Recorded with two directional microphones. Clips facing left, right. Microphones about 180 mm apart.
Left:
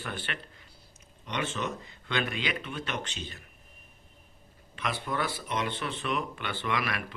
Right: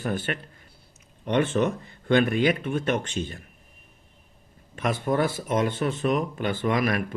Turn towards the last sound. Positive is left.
turn(degrees=-45)  # may be behind; listen again after turning